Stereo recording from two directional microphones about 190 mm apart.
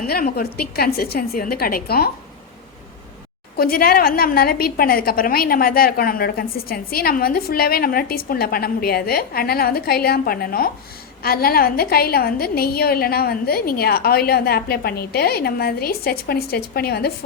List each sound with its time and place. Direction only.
0.1 s a woman's voice: 55° left (ahead or behind)
3.6 s a woman's voice: 50° left (ahead or behind)